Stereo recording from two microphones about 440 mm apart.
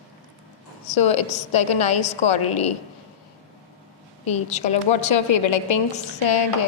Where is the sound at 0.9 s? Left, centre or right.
Left.